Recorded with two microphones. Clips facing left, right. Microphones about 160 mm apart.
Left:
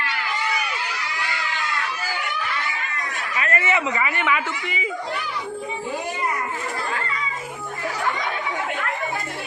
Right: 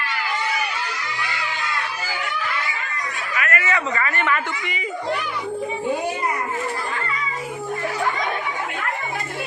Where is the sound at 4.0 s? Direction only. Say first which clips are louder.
Even; 10° left (ahead or behind).